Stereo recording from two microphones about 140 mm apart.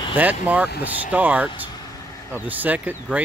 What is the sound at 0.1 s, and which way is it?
Speech, 10° right (ahead or behind).